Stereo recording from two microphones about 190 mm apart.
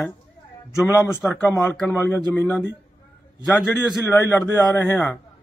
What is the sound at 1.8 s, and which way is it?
Speech, 10° left (ahead or behind).